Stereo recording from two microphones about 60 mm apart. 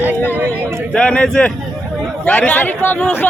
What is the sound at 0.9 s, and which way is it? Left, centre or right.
Speech, centre.